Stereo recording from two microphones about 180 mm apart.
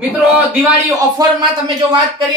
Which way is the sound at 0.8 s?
20° right (ahead or behind).